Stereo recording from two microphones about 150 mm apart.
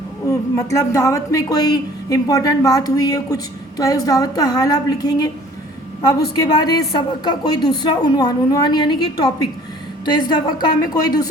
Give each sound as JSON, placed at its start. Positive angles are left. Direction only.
{"t": 0.3, "sound": "speech", "side_deg": 20}